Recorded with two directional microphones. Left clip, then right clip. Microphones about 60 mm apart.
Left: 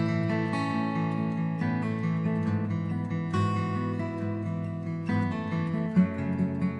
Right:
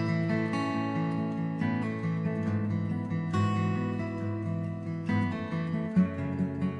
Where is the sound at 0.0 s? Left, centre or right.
Left.